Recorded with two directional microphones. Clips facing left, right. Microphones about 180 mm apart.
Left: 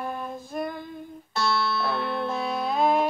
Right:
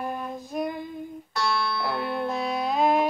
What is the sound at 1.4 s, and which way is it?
Music, 10° right (ahead or behind).